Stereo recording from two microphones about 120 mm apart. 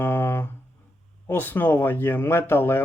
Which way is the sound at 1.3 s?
15° left (ahead or behind).